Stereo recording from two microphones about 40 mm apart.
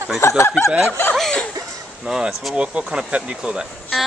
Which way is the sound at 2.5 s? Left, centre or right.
Right.